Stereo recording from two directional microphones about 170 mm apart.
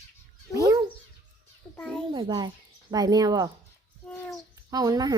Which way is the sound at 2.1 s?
25° right (ahead or behind).